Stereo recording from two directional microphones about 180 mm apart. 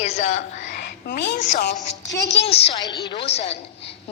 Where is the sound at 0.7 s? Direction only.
75° left (ahead or behind).